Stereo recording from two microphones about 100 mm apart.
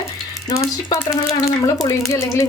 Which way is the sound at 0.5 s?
30° left (ahead or behind).